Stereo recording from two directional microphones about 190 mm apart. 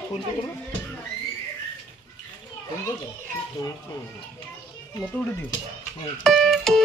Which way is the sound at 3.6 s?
15° left (ahead or behind).